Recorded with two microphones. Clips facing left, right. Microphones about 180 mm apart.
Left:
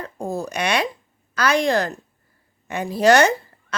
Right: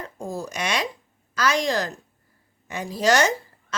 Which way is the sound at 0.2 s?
60° left (ahead or behind).